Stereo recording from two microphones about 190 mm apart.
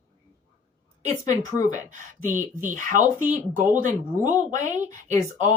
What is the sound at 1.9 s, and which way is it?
Speech, 40° right (ahead or behind).